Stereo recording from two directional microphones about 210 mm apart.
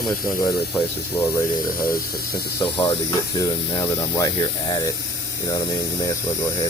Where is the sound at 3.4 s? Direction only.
15° left (ahead or behind).